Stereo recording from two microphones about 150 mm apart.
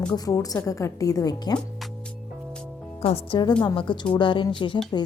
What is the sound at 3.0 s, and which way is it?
Speech, 40° left (ahead or behind).